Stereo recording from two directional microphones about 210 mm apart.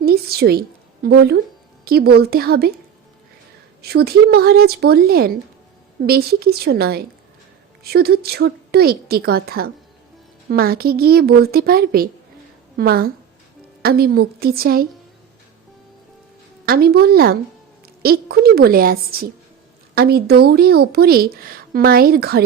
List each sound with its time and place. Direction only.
0.0 s a sound: 45° right (ahead or behind)
1.0 s a woman's voice: 50° right (ahead or behind)
3.8 s a woman's voice: 50° right (ahead or behind)
16.6 s a woman's voice: 50° right (ahead or behind)